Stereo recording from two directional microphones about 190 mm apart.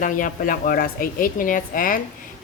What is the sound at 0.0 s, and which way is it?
Speech, 45° left (ahead or behind).